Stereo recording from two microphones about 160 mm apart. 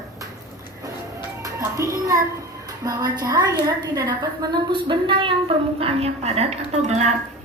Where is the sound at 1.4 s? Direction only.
20° right (ahead or behind).